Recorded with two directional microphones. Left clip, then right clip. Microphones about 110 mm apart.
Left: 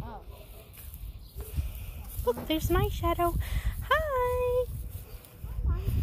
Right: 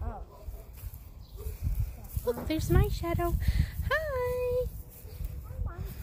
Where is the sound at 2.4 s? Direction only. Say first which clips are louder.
Left 2 dB; 10° left (ahead or behind).